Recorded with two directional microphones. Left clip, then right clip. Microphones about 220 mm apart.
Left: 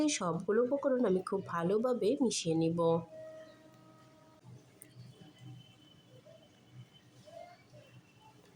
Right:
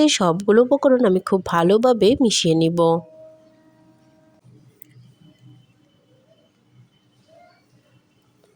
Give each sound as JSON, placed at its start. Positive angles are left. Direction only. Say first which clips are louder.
{"t": 0.0, "sound": "speech", "louder": "right 16 dB", "side_deg": -40}